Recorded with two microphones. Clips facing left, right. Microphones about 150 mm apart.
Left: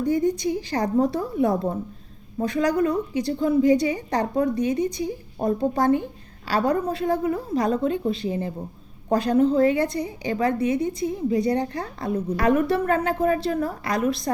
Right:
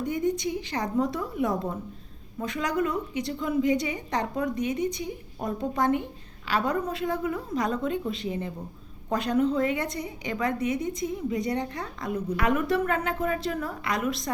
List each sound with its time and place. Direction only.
0.0 s a woman's voice: 35° left (ahead or behind)